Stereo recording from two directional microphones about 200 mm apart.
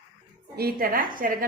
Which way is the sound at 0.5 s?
50° right (ahead or behind).